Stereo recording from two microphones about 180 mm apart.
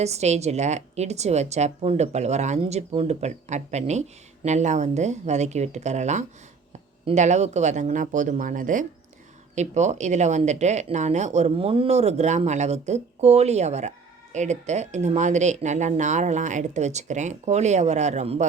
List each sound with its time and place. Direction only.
0.0 s speech: 35° right (ahead or behind)